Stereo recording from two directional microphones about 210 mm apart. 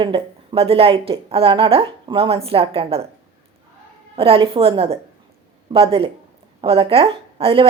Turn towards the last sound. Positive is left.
turn(degrees=-25)  # may be behind; listen again after turning